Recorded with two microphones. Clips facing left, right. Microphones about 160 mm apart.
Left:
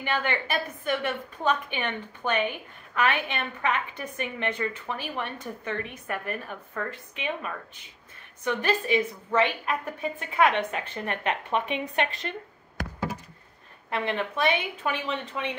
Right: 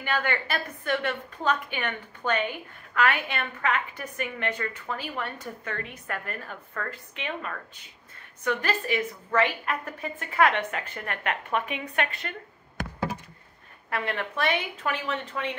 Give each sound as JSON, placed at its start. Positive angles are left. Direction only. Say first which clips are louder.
{"t": 0.0, "sound": "a woman's voice", "louder": "even", "side_deg": 20}
{"t": 13.8, "sound": "a woman's voice", "louder": "left 2 dB", "side_deg": 20}